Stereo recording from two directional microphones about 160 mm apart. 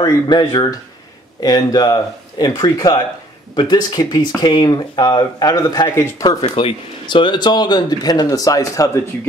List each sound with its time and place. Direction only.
0.0 s speech: 25° left (ahead or behind)